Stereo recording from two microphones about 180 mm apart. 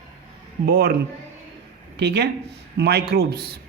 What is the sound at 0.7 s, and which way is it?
Speech, 60° right (ahead or behind).